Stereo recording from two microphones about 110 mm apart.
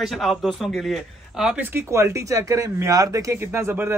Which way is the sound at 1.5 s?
20° right (ahead or behind).